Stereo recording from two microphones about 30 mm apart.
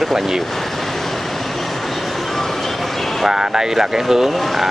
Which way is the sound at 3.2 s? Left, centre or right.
Centre.